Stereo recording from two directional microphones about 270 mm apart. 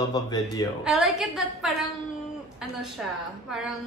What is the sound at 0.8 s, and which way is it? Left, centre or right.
Speech, centre.